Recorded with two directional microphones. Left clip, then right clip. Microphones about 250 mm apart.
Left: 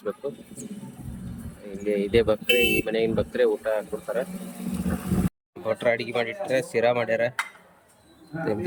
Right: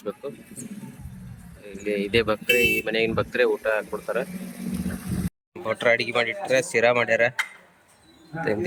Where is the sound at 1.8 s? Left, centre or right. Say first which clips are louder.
Left 1 dB; centre.